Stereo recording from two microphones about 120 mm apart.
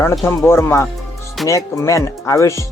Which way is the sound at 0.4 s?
20° left (ahead or behind).